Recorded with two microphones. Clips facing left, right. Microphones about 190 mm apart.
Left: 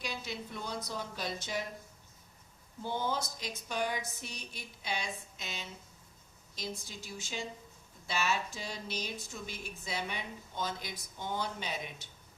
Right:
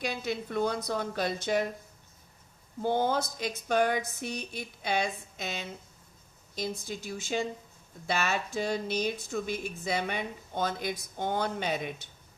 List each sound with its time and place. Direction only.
0.0 s speech: 55° right (ahead or behind)
2.8 s speech: 55° right (ahead or behind)